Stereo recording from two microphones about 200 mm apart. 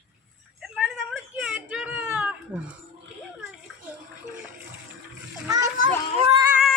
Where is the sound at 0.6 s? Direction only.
Centre (ahead or behind).